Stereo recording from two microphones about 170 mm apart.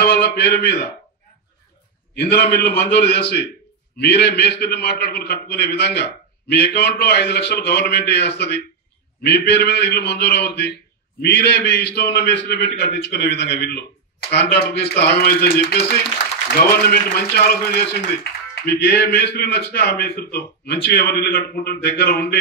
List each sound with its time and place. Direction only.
0.0 s a sound: 65° left (ahead or behind)
2.1 s a man's voice: 65° left (ahead or behind)
2.9 s a man's voice: 75° left (ahead or behind)
15.6 s speech: 80° left
16.6 s a man's voice: 60° left (ahead or behind)